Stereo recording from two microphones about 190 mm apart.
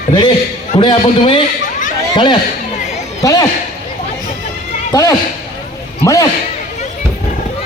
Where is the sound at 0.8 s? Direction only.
25° left (ahead or behind).